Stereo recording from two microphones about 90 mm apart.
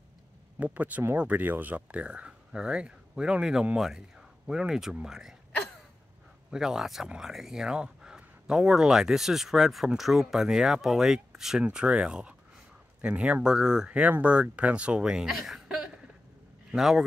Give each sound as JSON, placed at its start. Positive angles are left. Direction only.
{"t": 0.6, "sound": "speech", "side_deg": -15}
{"t": 6.5, "sound": "speech", "side_deg": -5}